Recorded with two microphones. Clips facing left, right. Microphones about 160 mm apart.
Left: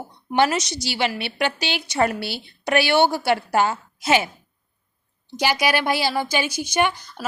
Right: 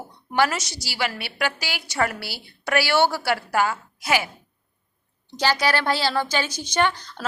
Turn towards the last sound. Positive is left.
turn(degrees=10)  # may be behind; listen again after turning